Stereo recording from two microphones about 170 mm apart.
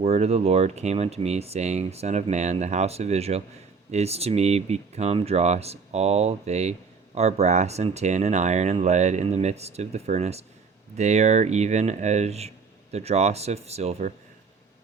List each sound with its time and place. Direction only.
0.0 s speech: 35° right (ahead or behind)